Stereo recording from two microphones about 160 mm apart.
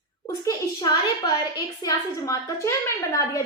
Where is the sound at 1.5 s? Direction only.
20° left (ahead or behind).